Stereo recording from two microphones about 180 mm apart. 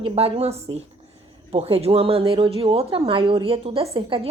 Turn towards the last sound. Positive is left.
turn(degrees=-30)  # may be behind; listen again after turning